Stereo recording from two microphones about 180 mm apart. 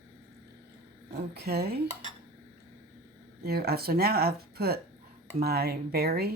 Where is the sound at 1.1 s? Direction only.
60° right (ahead or behind).